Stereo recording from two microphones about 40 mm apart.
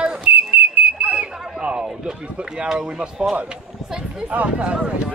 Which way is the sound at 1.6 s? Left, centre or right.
Right.